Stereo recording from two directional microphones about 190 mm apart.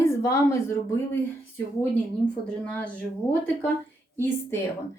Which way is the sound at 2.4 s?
5° left (ahead or behind).